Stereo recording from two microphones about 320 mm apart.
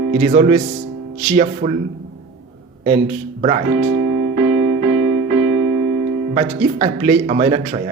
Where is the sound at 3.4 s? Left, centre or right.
Centre.